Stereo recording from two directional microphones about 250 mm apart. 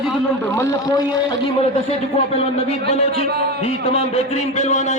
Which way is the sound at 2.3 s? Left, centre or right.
Left.